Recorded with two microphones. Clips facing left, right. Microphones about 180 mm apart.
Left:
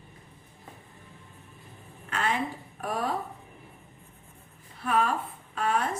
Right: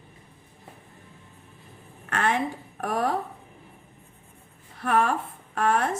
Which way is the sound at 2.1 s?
60° right (ahead or behind).